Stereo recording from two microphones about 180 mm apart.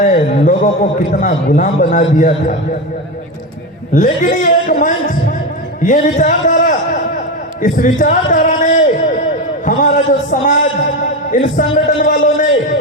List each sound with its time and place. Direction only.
0.0 s a man's voice: 45° left (ahead or behind)
3.9 s a man's voice: 45° left (ahead or behind)
7.6 s a sound: 45° left (ahead or behind)
10.4 s a man's voice: 45° left (ahead or behind)